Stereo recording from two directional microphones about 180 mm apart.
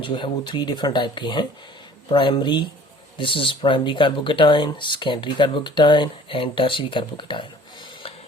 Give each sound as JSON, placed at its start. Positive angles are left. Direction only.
{"t": 0.0, "sound": "speech", "side_deg": 25}